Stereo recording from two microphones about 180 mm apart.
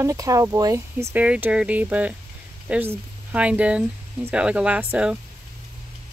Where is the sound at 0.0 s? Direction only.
15° right (ahead or behind).